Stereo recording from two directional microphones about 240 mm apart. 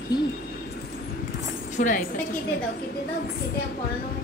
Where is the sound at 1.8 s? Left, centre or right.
Left.